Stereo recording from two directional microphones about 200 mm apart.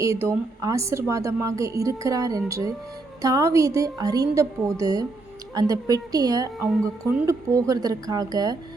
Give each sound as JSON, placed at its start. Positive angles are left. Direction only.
{"t": 0.0, "sound": "a woman's voice", "side_deg": -15}